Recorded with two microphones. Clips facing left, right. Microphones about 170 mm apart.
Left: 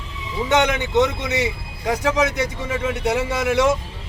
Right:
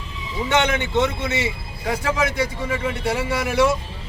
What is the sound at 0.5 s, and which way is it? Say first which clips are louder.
A man's voice: left 2 dB; 15° left (ahead or behind).